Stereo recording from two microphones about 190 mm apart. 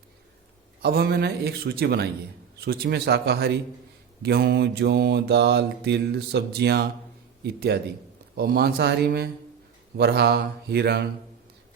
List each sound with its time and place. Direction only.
0.8 s mantra: 55° right (ahead or behind)